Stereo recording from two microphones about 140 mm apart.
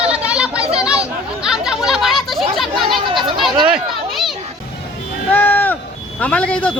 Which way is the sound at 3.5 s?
35° right (ahead or behind).